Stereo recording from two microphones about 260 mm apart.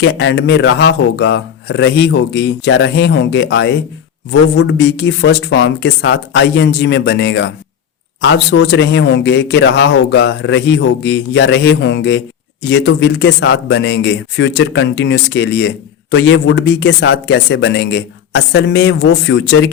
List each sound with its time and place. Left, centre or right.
0.0 s speech: left